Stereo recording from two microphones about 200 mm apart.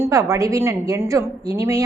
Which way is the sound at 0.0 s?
15° right (ahead or behind).